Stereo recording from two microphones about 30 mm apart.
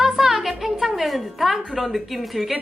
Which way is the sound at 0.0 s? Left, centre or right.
Centre.